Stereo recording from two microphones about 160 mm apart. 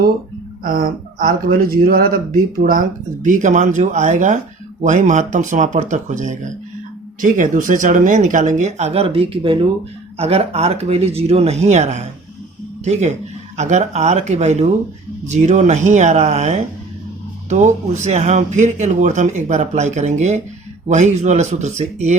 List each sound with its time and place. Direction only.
0.6 s speech: 60° right (ahead or behind); by 22.1 s 45° right (ahead or behind)